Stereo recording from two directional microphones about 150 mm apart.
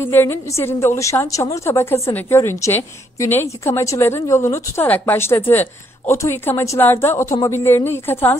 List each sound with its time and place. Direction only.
0.0 s a woman's voice: 15° left (ahead or behind)